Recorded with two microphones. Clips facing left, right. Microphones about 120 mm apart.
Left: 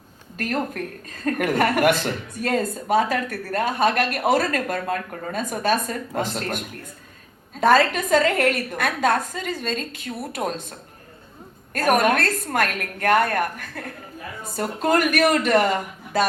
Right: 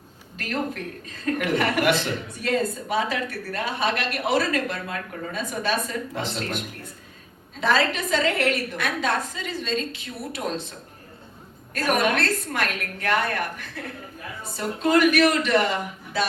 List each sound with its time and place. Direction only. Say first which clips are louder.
0.3 s a woman's voice: left 3 dB; 45° left (ahead or behind)